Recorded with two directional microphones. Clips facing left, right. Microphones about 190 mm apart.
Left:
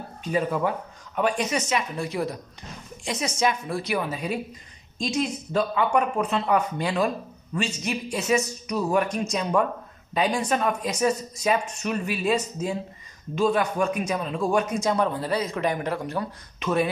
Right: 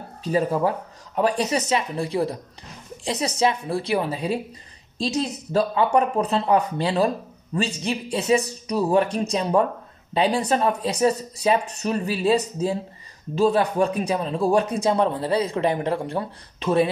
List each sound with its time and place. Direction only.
0.2 s speech: 35° right (ahead or behind)